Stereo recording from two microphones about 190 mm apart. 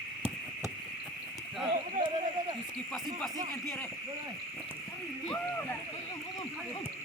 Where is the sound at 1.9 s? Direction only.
25° right (ahead or behind).